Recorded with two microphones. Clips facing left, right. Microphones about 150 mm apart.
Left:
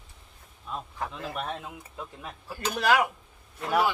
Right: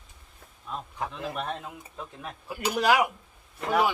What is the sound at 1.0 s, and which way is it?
Speech, 15° right (ahead or behind).